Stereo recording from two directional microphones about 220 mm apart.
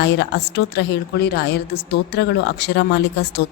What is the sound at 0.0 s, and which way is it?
A woman's voice, 50° left (ahead or behind).